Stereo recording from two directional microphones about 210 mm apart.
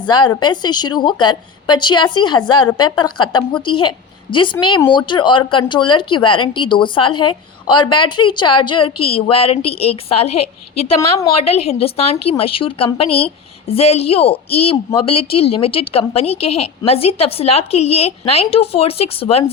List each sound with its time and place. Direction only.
0.1 s a woman's voice: 20° left (ahead or behind)